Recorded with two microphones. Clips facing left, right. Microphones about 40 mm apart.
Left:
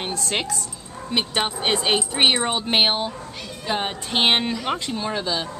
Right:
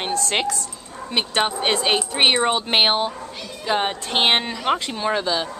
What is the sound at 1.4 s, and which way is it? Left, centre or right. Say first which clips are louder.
A woman's voice: right 4 dB; centre.